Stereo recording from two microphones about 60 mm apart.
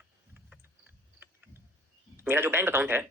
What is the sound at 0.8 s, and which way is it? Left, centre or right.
Cricket, right.